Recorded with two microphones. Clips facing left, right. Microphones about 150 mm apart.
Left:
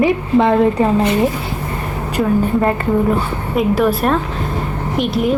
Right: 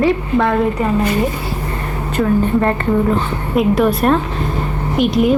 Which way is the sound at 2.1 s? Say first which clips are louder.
Right 1 dB; 10° left (ahead or behind).